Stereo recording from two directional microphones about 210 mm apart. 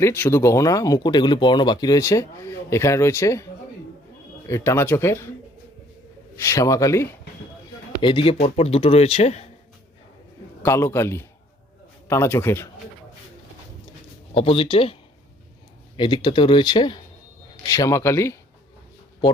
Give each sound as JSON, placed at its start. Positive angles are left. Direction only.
{"t": 0.0, "sound": "speech", "side_deg": 10}
{"t": 4.4, "sound": "speech", "side_deg": 15}
{"t": 6.3, "sound": "speech", "side_deg": 15}
{"t": 8.0, "sound": "speech", "side_deg": 25}
{"t": 10.6, "sound": "speech", "side_deg": 10}
{"t": 14.3, "sound": "speech", "side_deg": 25}
{"t": 16.0, "sound": "speech", "side_deg": 25}